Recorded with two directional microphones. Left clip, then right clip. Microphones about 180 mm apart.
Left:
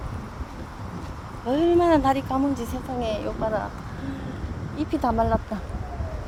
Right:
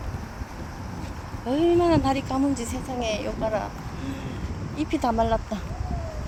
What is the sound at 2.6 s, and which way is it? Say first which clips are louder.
Speech: left 1 dB; 5° left (ahead or behind).